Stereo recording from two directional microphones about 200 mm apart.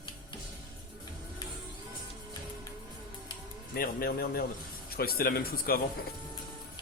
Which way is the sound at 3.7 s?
45° left (ahead or behind).